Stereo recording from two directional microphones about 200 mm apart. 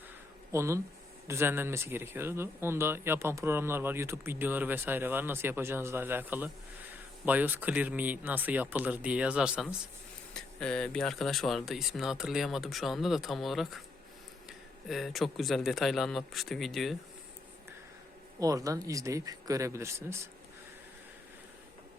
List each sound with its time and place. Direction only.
0.5 s speech: 15° right (ahead or behind)
14.8 s speech: centre (ahead or behind)
18.3 s speech: 15° right (ahead or behind)